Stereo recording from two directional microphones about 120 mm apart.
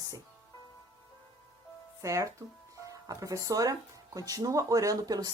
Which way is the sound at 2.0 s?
25° right (ahead or behind).